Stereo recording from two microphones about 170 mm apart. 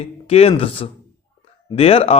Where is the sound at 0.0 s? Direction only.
35° left (ahead or behind).